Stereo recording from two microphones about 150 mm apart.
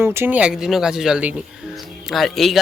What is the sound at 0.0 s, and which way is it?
Speech, 15° right (ahead or behind).